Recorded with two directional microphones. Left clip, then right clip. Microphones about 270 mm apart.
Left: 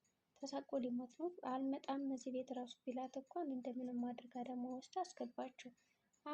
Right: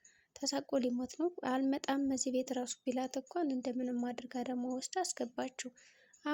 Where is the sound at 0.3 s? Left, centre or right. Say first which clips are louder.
Right 9 dB; right.